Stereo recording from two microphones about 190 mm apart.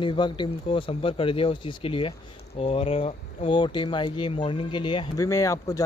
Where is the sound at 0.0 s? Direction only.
25° left (ahead or behind).